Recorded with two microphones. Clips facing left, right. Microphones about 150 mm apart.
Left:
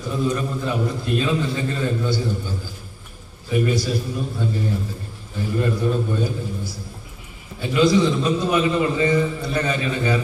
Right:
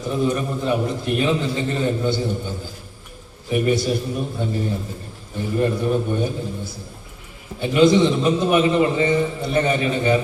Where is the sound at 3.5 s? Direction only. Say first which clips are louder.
Right 2 dB; 20° right (ahead or behind).